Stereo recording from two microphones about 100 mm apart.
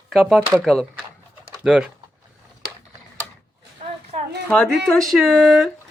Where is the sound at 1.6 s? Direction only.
10° right (ahead or behind).